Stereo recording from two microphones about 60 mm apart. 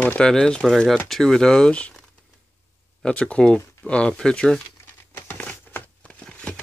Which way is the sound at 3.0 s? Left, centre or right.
Centre.